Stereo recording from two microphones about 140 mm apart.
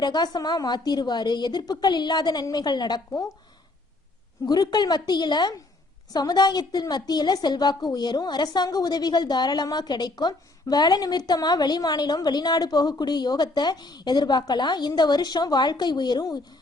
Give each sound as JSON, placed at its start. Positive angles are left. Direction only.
{"t": 0.0, "sound": "a woman's voice", "side_deg": 30}
{"t": 4.4, "sound": "a woman's voice", "side_deg": 30}